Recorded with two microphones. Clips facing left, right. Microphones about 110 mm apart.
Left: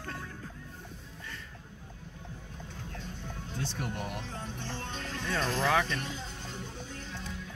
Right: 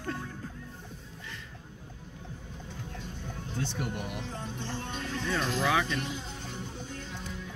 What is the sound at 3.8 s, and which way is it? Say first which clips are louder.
Speech: right 1 dB; 10° right (ahead or behind).